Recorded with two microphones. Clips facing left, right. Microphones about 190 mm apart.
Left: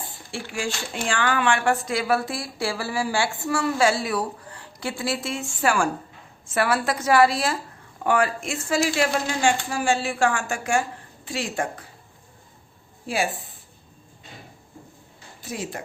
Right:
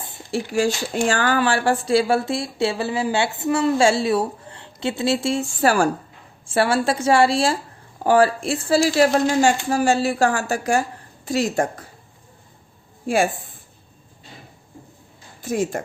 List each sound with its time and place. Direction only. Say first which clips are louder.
0.3 s speech: right 9 dB; 40° right (ahead or behind)
13.1 s speech: right 6 dB; 50° right (ahead or behind)
15.4 s a woman's voice: right 9 dB; 50° right (ahead or behind)